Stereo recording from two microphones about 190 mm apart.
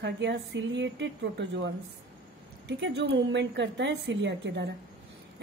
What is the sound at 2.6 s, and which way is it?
A woman's voice, 65° right (ahead or behind).